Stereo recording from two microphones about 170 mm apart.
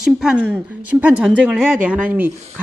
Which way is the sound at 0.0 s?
5° right (ahead or behind).